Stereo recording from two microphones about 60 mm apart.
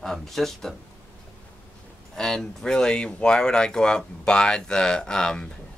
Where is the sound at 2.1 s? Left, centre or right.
Centre.